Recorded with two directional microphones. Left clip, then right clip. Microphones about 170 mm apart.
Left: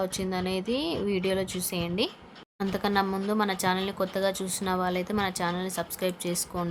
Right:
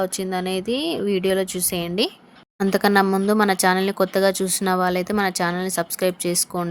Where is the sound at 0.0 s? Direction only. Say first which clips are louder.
Right 6 dB; 30° right (ahead or behind).